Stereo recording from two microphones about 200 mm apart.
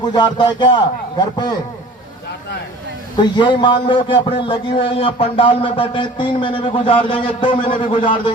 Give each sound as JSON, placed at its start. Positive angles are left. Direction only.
{"t": 0.0, "sound": "a man's voice", "side_deg": 20}
{"t": 3.2, "sound": "a man's voice", "side_deg": 25}